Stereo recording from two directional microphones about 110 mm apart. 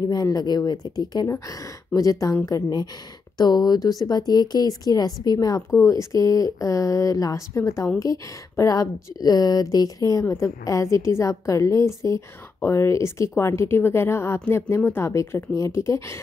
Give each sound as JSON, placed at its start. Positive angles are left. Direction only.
{"t": 0.1, "sound": "speech", "side_deg": 35}
{"t": 5.7, "sound": "speech", "side_deg": 25}